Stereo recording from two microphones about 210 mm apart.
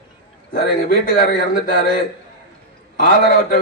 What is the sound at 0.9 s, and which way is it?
A man's voice, 40° left (ahead or behind).